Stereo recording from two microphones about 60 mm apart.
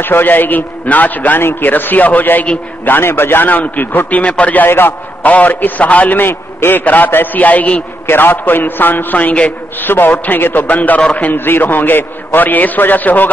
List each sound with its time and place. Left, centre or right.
0.0 s a man's voice: left
4.6 s a man's voice: left
8.1 s a man's voice: left
11.3 s a man's voice: left